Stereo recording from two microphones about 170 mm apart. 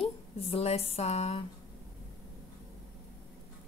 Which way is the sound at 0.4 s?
35° left (ahead or behind).